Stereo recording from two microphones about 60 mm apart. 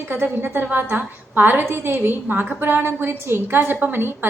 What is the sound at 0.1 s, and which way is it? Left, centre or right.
A woman's voice, right.